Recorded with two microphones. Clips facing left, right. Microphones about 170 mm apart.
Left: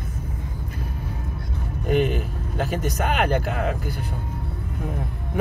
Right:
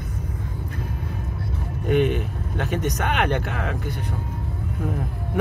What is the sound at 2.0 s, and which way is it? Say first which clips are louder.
Speech: right 1 dB; centre (ahead or behind).